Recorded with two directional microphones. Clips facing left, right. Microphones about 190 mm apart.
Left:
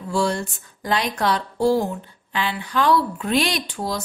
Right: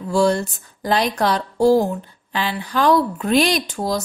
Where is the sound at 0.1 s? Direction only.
40° right (ahead or behind).